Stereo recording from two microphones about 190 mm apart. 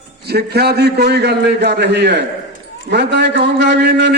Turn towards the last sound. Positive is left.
turn(degrees=-65)  # may be behind; listen again after turning